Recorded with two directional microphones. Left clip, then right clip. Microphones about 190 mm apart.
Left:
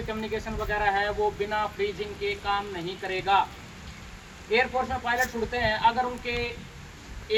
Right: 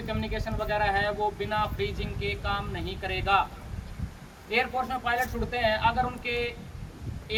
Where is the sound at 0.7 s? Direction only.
25° right (ahead or behind).